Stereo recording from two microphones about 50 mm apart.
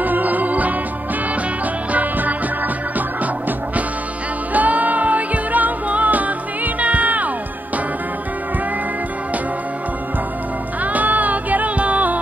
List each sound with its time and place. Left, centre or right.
0.0 s music: right
1.9 s music: right
4.6 s music: right
10.8 s music: right